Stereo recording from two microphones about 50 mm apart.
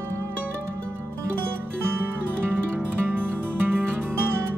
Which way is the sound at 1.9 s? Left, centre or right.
Right.